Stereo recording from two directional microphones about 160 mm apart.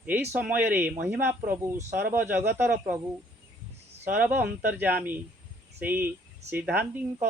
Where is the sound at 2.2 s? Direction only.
15° right (ahead or behind).